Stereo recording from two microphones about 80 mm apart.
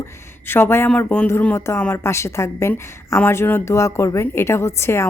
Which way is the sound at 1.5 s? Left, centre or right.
Left.